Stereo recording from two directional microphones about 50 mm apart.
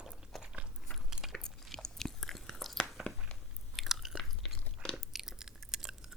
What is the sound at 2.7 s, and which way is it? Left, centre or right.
Biting, centre.